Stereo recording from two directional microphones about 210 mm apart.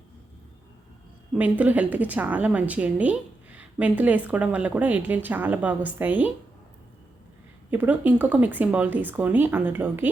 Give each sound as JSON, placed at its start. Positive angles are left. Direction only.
{"t": 1.3, "sound": "a woman's voice", "side_deg": -5}
{"t": 7.7, "sound": "a woman's voice", "side_deg": -10}